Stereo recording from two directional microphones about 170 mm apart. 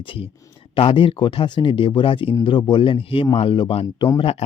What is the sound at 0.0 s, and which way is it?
Speech, 30° left (ahead or behind).